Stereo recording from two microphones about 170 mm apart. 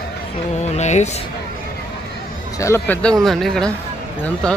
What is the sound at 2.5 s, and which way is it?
Speech, 15° left (ahead or behind).